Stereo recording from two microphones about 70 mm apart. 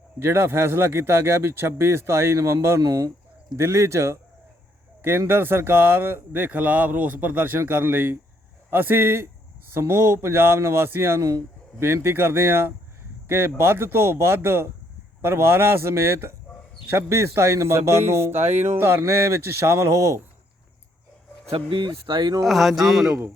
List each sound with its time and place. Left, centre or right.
0.2 s speech: right
2.8 s speech: right
11.2 s speech: right
21.8 s speech: right
22.4 s speech: centre